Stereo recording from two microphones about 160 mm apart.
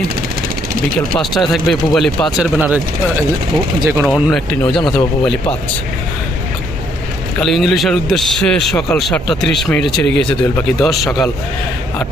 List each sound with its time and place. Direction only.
1.2 s a man's voice: centre (ahead or behind)
2.6 s speech: 10° right (ahead or behind)
4.0 s a man's voice: centre (ahead or behind)
7.4 s a man's voice: centre (ahead or behind)